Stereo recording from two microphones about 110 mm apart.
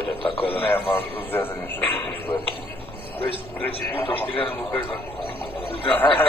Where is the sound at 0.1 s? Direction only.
55° left (ahead or behind).